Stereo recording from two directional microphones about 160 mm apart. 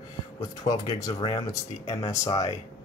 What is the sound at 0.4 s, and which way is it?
Speech, 25° left (ahead or behind).